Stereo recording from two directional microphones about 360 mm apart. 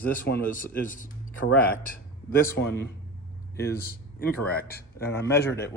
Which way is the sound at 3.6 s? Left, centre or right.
Left.